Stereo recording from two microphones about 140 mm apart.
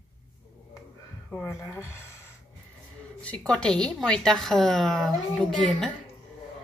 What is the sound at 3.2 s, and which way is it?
A woman's voice, 10° left (ahead or behind).